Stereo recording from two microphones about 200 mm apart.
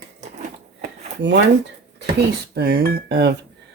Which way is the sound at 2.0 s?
55° right (ahead or behind).